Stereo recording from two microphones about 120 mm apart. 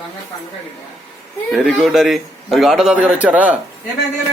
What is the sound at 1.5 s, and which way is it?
A man's voice, centre (ahead or behind).